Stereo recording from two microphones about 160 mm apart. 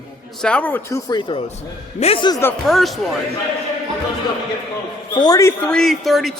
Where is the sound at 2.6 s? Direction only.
Centre (ahead or behind).